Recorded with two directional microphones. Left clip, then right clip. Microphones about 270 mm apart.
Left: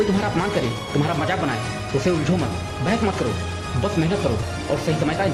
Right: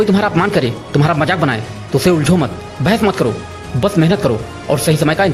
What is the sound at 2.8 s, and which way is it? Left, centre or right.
Speech, right.